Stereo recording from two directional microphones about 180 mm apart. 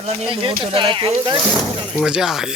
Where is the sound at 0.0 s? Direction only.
35° right (ahead or behind).